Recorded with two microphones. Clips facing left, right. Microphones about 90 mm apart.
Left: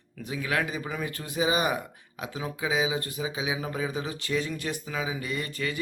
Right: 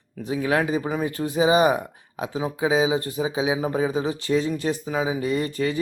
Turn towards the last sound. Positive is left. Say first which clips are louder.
# right 8 dB
turn(degrees=-30)  # may be behind; listen again after turning